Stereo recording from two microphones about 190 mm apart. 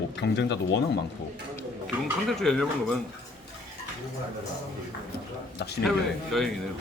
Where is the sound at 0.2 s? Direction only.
65° left (ahead or behind).